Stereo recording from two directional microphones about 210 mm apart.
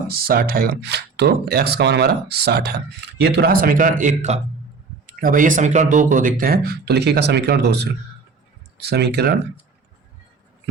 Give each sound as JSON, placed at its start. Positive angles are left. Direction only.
{"t": 0.1, "sound": "speech", "side_deg": -45}